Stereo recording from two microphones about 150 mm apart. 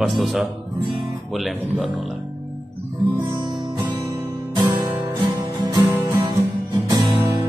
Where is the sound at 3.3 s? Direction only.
30° right (ahead or behind).